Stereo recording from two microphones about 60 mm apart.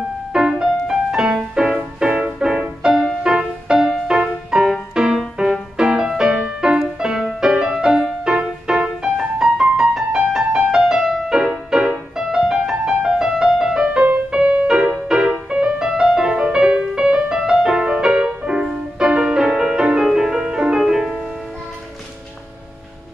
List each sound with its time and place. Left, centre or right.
0.3 s music: centre